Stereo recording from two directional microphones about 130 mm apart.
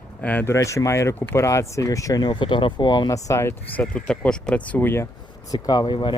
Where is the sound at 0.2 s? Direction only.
15° left (ahead or behind).